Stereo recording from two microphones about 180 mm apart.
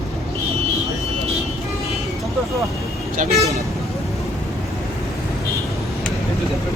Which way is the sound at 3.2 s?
35° right (ahead or behind).